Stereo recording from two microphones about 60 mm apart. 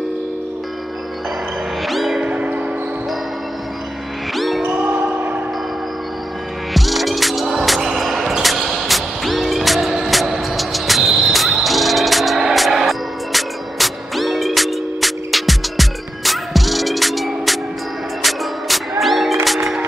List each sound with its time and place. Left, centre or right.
1.9 s music: centre
2.2 s music: right
4.4 s music: centre
4.6 s music: right
6.7 s music: centre